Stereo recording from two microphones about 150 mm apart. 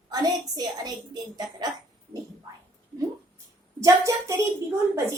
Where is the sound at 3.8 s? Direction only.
20° right (ahead or behind).